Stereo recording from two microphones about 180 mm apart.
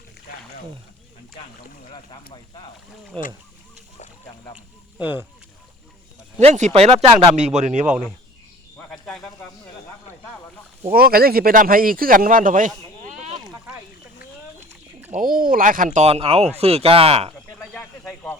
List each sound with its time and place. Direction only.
3.1 s speech: 5° left (ahead or behind)
4.5 s speech: 10° right (ahead or behind)
6.4 s speech: 40° right (ahead or behind)
8.9 s speech: 5° left (ahead or behind)
10.9 s speech: 60° right (ahead or behind)
15.1 s speech: 50° right (ahead or behind); by 17.3 s 35° right (ahead or behind)
17.7 s a sound: 10° left (ahead or behind)